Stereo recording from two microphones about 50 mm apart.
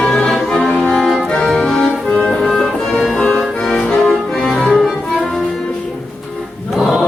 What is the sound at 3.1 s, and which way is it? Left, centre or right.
Accordion, centre.